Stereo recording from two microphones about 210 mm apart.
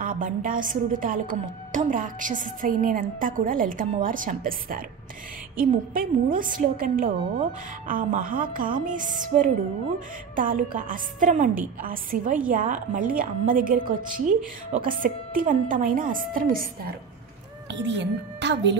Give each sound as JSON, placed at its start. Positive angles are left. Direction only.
{"t": 0.0, "sound": "a woman's voice", "side_deg": -40}
{"t": 17.6, "sound": "a woman's voice", "side_deg": -55}